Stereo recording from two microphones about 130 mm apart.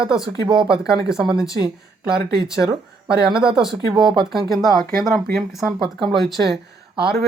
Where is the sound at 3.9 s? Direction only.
35° right (ahead or behind).